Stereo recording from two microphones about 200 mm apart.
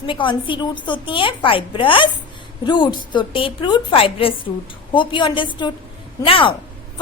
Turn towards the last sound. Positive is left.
turn(degrees=25)  # may be behind; listen again after turning